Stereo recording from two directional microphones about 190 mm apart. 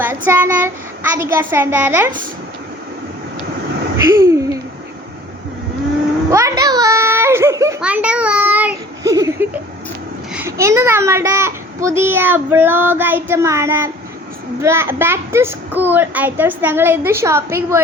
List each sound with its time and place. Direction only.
0.3 s a child's voice: 10° right (ahead or behind)
3.9 s a sound: 15° right (ahead or behind)
6.3 s giggle: 15° right (ahead or behind)
7.8 s child singing: 5° right (ahead or behind)
10.3 s a child's voice: 15° right (ahead or behind)